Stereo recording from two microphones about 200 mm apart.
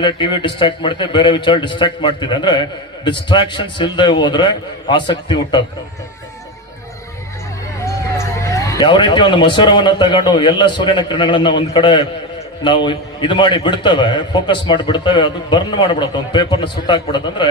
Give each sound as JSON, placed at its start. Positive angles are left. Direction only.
{"t": 0.0, "sound": "a man's voice", "side_deg": 25}
{"t": 7.8, "sound": "a man's voice", "side_deg": 15}